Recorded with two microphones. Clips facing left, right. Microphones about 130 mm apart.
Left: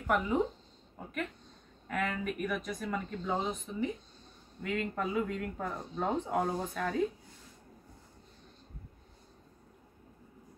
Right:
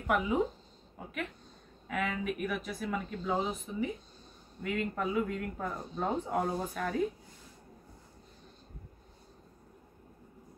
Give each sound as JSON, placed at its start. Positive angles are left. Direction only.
{"t": 0.0, "sound": "speech", "side_deg": -5}